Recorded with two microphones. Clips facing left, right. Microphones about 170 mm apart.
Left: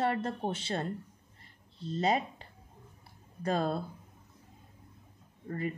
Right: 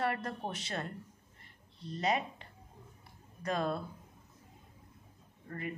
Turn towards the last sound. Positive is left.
turn(degrees=30)  # may be behind; listen again after turning